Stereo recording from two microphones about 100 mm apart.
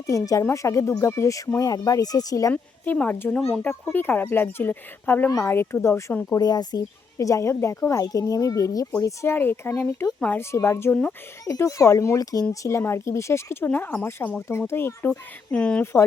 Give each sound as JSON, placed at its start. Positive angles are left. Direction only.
{"t": 0.1, "sound": "speech", "side_deg": 30}
{"t": 2.5, "sound": "speech", "side_deg": 15}
{"t": 6.3, "sound": "speech", "side_deg": 40}
{"t": 9.3, "sound": "speech", "side_deg": 20}
{"t": 10.5, "sound": "speech", "side_deg": 30}
{"t": 15.5, "sound": "speech", "side_deg": 10}
{"t": 15.8, "sound": "speech", "side_deg": 25}